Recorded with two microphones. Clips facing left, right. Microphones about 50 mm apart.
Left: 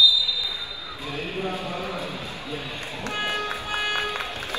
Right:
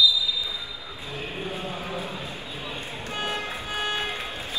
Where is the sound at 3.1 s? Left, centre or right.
Left.